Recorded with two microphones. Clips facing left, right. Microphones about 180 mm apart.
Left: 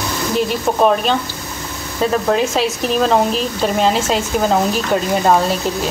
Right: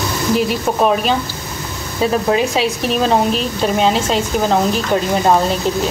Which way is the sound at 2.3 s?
Centre (ahead or behind).